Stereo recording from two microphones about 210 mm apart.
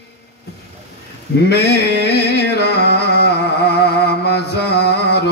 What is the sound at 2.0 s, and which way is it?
Carnatic music, 50° left (ahead or behind).